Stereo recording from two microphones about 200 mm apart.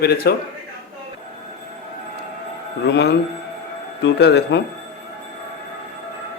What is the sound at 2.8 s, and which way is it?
Music, 55° left (ahead or behind).